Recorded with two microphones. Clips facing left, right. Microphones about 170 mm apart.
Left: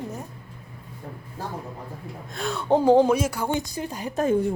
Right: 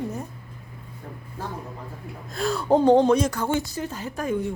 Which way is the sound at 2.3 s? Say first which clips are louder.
Right 2 dB; centre (ahead or behind).